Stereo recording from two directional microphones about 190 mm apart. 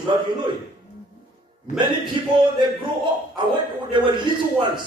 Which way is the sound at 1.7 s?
25° right (ahead or behind).